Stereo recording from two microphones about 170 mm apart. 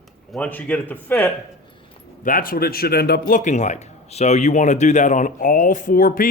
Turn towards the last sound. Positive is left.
turn(degrees=55)  # may be behind; listen again after turning